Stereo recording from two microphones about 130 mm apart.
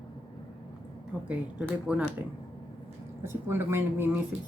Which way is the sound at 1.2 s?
10° right (ahead or behind).